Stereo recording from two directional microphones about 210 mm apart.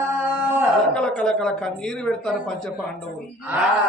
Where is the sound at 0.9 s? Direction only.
5° left (ahead or behind).